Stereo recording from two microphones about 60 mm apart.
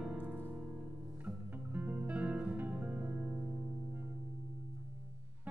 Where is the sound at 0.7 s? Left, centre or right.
Right.